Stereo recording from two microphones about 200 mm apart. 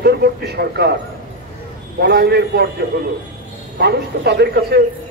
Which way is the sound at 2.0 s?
55° right (ahead or behind).